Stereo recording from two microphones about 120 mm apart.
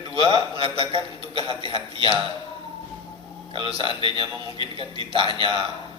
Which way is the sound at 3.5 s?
45° right (ahead or behind).